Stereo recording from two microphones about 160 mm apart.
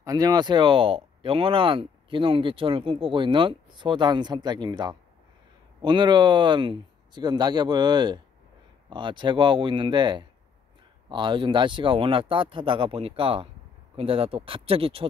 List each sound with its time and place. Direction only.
0.0 s speech: 25° right (ahead or behind)